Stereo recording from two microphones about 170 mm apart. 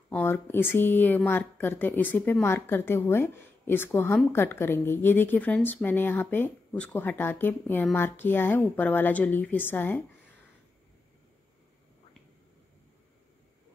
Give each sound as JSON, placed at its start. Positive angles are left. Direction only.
{"t": 0.1, "sound": "speech", "side_deg": 10}